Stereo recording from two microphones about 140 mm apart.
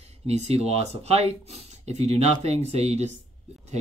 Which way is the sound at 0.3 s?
50° right (ahead or behind).